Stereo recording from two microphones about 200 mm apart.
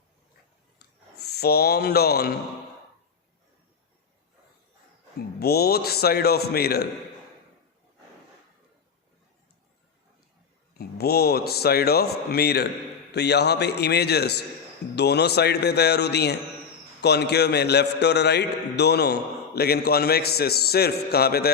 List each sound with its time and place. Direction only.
0.8 s a sound: 55° left (ahead or behind)
5.4 s a man's voice: 50° left (ahead or behind)
10.8 s a man's voice: 50° left (ahead or behind)